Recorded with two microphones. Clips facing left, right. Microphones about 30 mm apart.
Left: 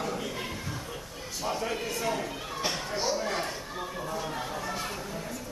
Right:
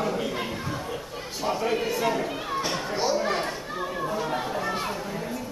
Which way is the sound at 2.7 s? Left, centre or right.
Centre.